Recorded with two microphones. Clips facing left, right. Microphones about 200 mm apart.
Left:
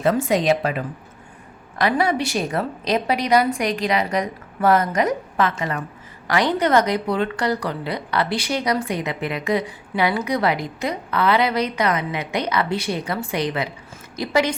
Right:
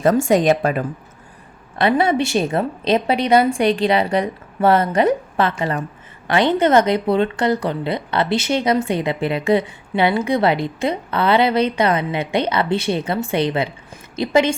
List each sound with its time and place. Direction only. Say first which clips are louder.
0.0 s a woman's voice: right 4 dB; 45° right (ahead or behind)
1.8 s a woman's voice: right 3 dB; 25° right (ahead or behind)